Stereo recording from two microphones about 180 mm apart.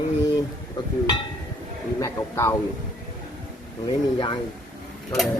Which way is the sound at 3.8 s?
25° left (ahead or behind).